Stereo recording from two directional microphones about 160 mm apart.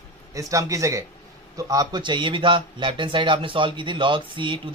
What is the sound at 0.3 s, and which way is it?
A man's voice, 20° right (ahead or behind).